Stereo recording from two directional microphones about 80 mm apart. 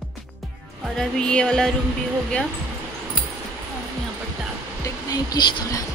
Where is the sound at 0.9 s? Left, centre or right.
Centre.